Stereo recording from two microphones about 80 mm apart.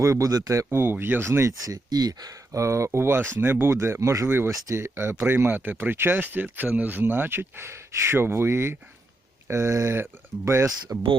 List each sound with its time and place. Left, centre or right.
0.0 s speech: right